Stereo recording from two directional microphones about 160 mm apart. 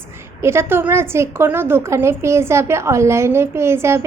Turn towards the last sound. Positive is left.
turn(degrees=-15)  # may be behind; listen again after turning